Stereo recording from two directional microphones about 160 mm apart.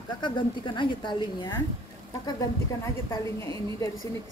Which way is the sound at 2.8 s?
20° left (ahead or behind).